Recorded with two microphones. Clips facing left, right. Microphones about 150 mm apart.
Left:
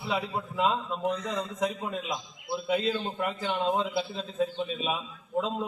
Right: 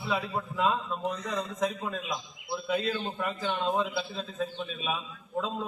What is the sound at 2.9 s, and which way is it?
A man's voice, 10° left (ahead or behind).